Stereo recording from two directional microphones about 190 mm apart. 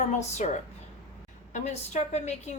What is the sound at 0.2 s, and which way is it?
Speech, 35° left (ahead or behind).